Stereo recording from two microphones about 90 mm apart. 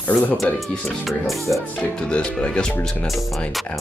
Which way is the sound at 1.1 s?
Centre (ahead or behind).